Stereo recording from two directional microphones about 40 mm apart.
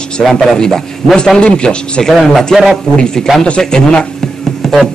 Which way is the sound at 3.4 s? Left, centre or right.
Left.